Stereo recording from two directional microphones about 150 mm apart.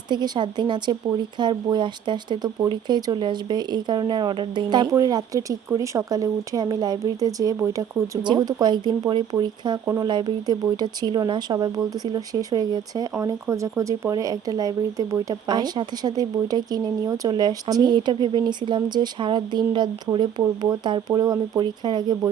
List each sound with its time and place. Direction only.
0.1 s speech: 30° right (ahead or behind)
9.8 s speech: 20° right (ahead or behind)
10.1 s speech: 30° right (ahead or behind)